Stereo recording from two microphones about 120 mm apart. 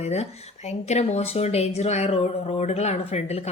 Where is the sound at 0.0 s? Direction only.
65° left (ahead or behind).